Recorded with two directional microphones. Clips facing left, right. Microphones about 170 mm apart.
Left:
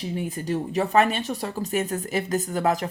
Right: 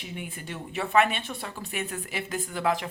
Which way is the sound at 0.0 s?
35° left (ahead or behind).